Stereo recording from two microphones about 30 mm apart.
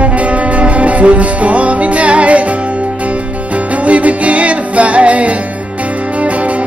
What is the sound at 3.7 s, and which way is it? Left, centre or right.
Music, right.